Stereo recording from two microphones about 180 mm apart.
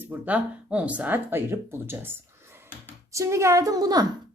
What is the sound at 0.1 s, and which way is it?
Speech, 10° right (ahead or behind).